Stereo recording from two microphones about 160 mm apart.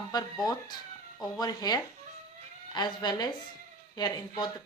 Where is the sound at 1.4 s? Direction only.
25° left (ahead or behind).